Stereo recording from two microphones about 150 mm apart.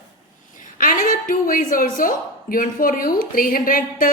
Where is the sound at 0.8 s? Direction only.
65° left (ahead or behind).